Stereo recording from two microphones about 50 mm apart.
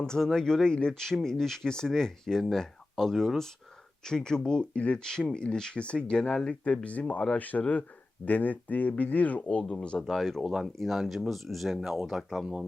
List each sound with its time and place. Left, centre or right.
0.0 s speech: centre
10.0 s speech: centre
10.4 s speech: centre
10.8 s speech: centre